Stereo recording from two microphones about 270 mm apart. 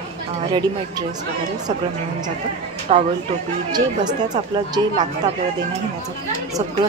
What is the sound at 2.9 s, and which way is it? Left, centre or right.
Speech, right.